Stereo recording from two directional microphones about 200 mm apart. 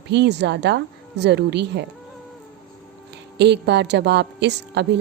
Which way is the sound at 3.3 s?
60° right (ahead or behind).